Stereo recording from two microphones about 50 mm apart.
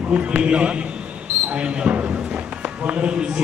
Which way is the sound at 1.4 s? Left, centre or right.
Right.